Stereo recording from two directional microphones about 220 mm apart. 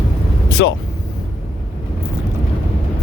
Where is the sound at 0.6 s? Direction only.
55° left (ahead or behind).